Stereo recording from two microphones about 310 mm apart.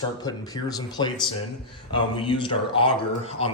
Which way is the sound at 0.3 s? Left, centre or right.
Centre.